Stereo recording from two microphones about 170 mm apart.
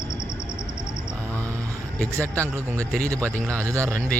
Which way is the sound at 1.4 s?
20° right (ahead or behind).